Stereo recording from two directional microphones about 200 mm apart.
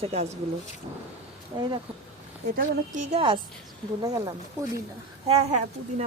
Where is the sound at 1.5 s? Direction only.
15° right (ahead or behind).